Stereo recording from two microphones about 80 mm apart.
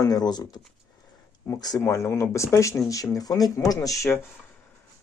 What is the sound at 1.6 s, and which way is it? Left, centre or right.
Speech, left.